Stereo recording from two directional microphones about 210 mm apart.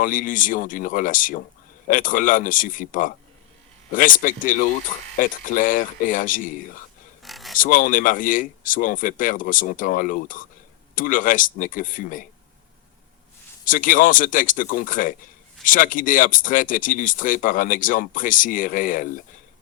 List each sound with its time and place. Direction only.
0.0 s speech: 40° left (ahead or behind)
7.2 s a sound: centre (ahead or behind)
7.6 s speech: 40° left (ahead or behind)
13.7 s speech: 40° left (ahead or behind)